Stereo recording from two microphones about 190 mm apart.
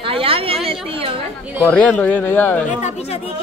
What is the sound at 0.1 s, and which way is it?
A woman's voice, 30° right (ahead or behind).